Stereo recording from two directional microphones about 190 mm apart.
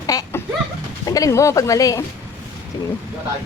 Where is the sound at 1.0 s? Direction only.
15° left (ahead or behind).